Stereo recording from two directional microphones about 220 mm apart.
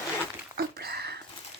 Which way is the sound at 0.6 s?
45° right (ahead or behind).